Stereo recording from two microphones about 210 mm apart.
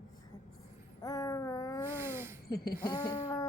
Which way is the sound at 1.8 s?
10° right (ahead or behind).